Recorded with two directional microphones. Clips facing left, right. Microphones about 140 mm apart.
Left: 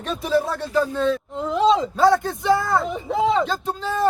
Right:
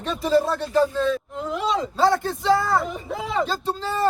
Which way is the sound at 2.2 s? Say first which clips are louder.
Even; 15° left (ahead or behind).